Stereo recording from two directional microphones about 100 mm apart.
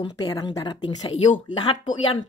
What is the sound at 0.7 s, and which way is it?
Speech, 50° left (ahead or behind).